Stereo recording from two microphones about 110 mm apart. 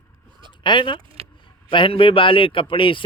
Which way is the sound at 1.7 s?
50° left (ahead or behind).